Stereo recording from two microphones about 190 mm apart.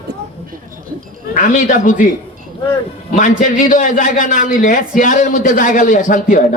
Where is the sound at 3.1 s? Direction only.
45° left (ahead or behind).